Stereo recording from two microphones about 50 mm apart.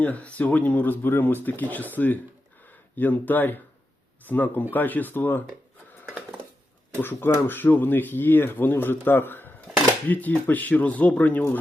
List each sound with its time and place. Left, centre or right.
0.0 s speech: left
7.0 s speech: left